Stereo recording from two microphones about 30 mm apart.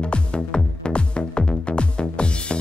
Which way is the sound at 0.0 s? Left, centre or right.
Left.